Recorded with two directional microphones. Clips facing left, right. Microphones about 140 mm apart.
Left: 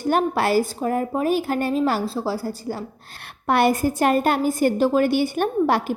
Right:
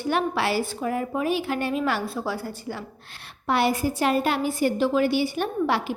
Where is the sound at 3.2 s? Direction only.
55° left (ahead or behind).